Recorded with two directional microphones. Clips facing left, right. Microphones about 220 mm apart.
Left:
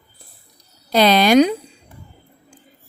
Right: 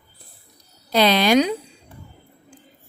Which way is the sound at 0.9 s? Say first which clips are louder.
Left 3 dB; 45° left (ahead or behind).